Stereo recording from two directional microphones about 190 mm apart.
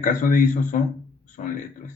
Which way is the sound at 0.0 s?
45° left (ahead or behind).